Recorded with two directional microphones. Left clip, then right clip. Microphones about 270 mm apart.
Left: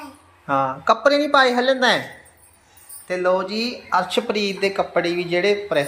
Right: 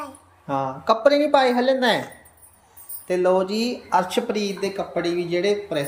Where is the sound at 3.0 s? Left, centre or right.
Centre.